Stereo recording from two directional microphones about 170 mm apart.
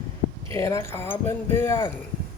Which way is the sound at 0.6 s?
15° left (ahead or behind).